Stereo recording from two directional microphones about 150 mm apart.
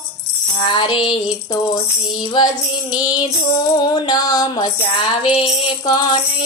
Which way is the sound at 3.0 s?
30° left (ahead or behind).